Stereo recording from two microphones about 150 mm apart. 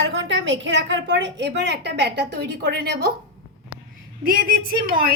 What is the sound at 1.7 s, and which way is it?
A woman's voice, 90° right.